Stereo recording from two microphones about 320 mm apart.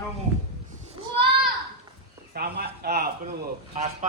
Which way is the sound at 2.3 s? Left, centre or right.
Right.